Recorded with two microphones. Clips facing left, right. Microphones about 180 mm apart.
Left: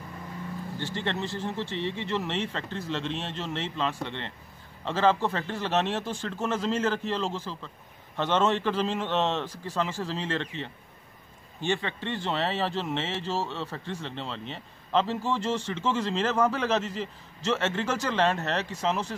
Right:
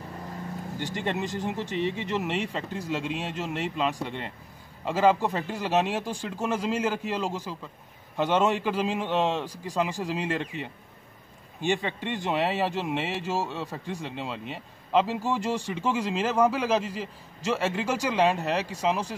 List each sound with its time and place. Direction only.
0.7 s speech: 15° right (ahead or behind)